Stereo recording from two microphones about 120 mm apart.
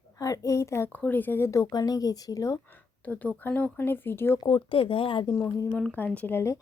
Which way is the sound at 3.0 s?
15° left (ahead or behind).